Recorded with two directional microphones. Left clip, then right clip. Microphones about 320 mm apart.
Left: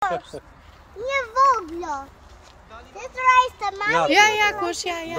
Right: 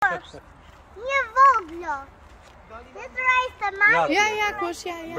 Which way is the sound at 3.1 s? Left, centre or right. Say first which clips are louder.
Left 5 dB; left.